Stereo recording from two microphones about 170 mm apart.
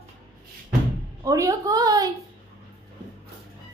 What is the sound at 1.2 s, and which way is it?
Speech, 20° right (ahead or behind).